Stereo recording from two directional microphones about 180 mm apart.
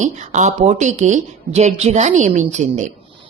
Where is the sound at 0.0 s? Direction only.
40° right (ahead or behind).